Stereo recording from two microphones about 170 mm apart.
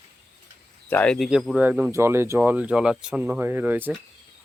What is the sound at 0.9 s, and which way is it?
Speech, 10° left (ahead or behind).